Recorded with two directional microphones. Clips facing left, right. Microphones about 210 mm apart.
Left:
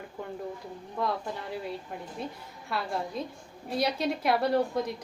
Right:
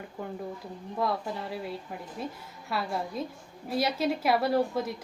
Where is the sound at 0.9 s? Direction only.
5° right (ahead or behind).